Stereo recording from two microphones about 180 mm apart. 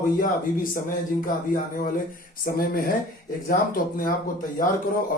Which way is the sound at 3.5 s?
50° left (ahead or behind).